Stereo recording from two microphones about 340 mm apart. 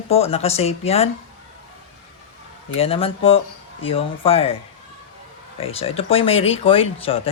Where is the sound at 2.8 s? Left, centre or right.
Centre.